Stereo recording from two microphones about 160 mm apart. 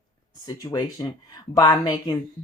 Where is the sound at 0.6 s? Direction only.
25° left (ahead or behind).